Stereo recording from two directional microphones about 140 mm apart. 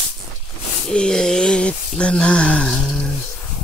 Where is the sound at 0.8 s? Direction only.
5° left (ahead or behind).